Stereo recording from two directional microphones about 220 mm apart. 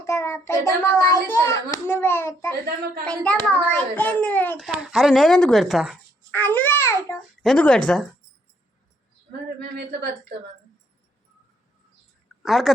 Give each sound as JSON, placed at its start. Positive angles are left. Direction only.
{"t": 0.0, "sound": "a child's voice", "side_deg": 10}
{"t": 6.3, "sound": "babbling", "side_deg": 10}
{"t": 7.4, "sound": "a child's voice", "side_deg": 5}
{"t": 9.7, "sound": "speech", "side_deg": -45}
{"t": 12.4, "sound": "speech", "side_deg": 0}